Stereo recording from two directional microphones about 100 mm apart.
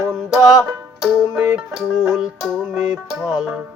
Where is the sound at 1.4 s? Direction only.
20° right (ahead or behind).